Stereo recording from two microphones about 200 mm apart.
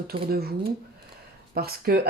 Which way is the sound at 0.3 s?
50° right (ahead or behind).